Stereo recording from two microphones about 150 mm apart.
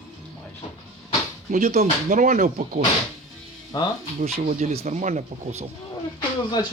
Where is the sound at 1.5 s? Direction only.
50° right (ahead or behind).